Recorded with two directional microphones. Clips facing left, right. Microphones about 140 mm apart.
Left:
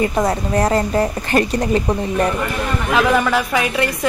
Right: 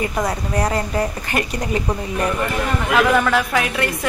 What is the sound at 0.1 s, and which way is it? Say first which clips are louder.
A woman's voice: left 4 dB; 25° left (ahead or behind).